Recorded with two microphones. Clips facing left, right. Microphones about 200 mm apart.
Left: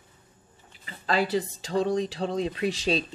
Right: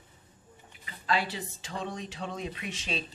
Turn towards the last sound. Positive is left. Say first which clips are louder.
# left 10 dB
turn(degrees=35)  # may be behind; listen again after turning